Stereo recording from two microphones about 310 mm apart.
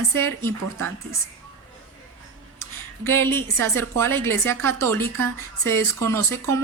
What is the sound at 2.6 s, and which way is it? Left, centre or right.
A woman's voice, centre.